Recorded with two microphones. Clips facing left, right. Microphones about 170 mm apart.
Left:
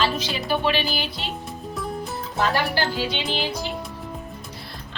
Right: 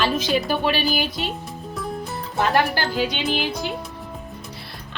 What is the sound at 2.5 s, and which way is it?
Music, 50° right (ahead or behind).